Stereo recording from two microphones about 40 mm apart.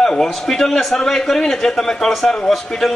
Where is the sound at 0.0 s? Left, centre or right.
Centre.